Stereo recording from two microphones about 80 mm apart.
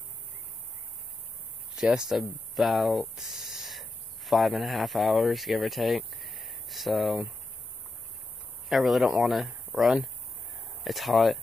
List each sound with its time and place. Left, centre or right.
1.8 s speech: centre
8.6 s speech: centre
10.8 s speech: centre